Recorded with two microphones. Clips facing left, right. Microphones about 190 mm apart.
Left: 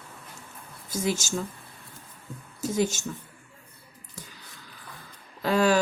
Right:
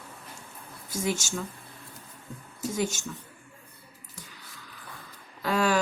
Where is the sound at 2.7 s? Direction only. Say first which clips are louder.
Left 4 dB; 30° left (ahead or behind).